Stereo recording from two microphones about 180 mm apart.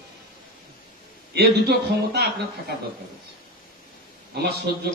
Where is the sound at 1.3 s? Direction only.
65° right (ahead or behind).